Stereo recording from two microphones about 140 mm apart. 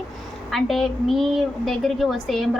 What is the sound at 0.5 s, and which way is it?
A woman's voice, centre (ahead or behind).